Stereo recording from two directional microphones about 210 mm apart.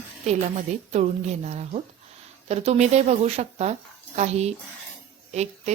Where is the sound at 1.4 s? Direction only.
30° right (ahead or behind).